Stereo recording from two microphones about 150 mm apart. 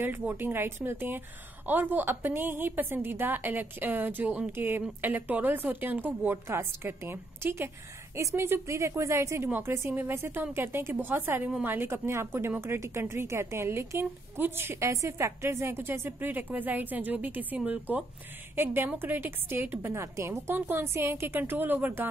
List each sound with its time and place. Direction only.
0.0 s a woman's voice: 15° right (ahead or behind)